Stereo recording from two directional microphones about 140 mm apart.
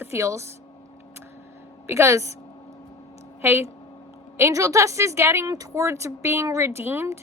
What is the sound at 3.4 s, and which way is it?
A woman's voice, 15° right (ahead or behind).